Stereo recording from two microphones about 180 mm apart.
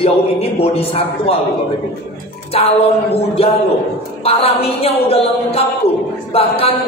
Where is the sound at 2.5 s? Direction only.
35° left (ahead or behind).